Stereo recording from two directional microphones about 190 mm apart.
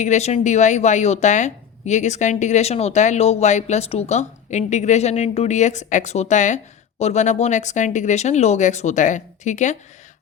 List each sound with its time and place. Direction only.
0.0 s speech: 35° left (ahead or behind)